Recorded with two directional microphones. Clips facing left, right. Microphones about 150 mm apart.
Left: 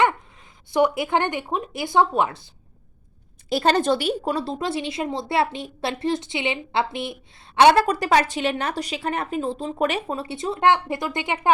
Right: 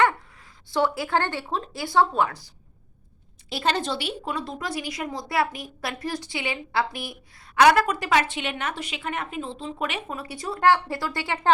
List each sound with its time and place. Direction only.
0.7 s a woman's voice: 20° left (ahead or behind)
3.5 s a woman's voice: 40° left (ahead or behind); by 11.5 s 20° left (ahead or behind)